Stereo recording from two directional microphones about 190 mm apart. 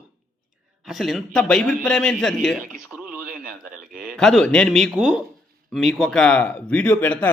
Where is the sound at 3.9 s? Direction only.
Centre (ahead or behind).